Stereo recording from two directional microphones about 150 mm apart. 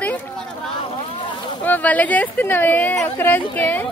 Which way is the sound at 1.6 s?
10° left (ahead or behind).